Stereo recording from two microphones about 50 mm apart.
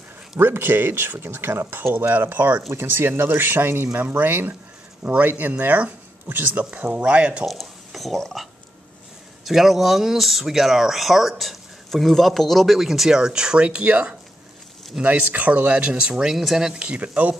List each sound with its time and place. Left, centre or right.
0.4 s speech: right
1.8 s speech: right
6.2 s speech: right
7.1 s speech: right
7.4 s speech: centre
16.7 s speech: right